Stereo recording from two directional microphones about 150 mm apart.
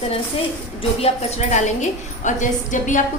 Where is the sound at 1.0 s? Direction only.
50° left (ahead or behind).